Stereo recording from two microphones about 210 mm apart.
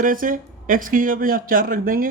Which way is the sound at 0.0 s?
40° right (ahead or behind).